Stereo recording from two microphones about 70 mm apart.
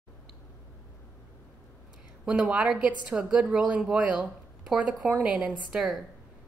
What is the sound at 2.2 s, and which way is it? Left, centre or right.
A woman's voice, centre.